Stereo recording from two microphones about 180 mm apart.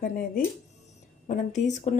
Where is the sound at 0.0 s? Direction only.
50° left (ahead or behind).